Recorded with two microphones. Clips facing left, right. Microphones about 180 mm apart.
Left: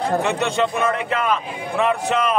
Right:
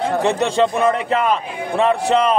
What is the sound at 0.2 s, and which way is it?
A man's voice, 35° right (ahead or behind).